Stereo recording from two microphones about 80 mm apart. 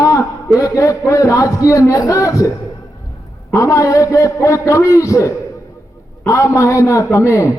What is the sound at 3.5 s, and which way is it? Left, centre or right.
A man's voice, left.